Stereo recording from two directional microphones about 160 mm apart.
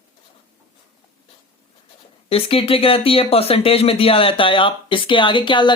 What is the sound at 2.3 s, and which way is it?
Speech, 35° left (ahead or behind).